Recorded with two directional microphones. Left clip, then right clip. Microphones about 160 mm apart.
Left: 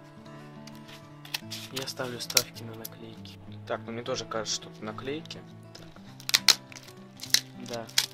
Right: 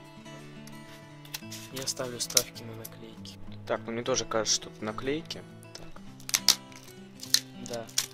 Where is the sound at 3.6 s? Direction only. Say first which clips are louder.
Right 3 dB; 45° right (ahead or behind).